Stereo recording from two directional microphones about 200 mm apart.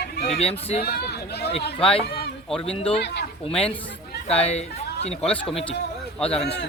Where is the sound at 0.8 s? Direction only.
50° left (ahead or behind).